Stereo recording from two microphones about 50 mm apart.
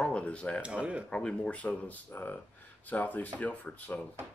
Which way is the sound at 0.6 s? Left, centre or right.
Right.